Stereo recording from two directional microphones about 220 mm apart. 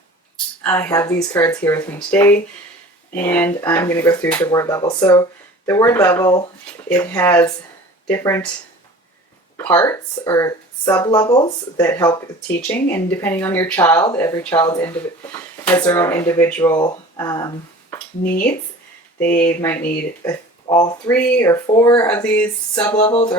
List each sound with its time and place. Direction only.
0.6 s speech: 10° left (ahead or behind)
9.6 s speech: 10° left (ahead or behind)
19.2 s speech: 5° left (ahead or behind)
21.1 s speech: 5° left (ahead or behind)